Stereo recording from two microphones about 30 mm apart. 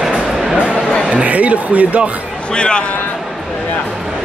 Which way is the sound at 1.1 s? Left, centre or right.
Right.